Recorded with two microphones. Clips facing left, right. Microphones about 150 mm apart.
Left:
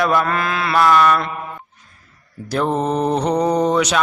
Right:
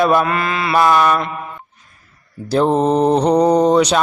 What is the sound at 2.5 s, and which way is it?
Mantra, 30° right (ahead or behind).